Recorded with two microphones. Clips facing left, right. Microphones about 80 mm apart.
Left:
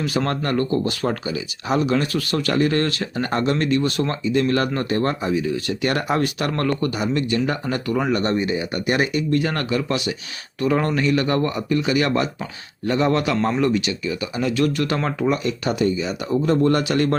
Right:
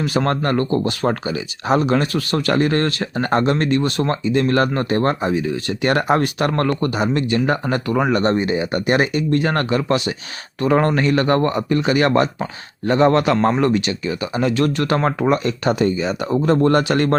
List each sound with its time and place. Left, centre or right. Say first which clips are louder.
0.0 s a man's voice: right 3 dB; right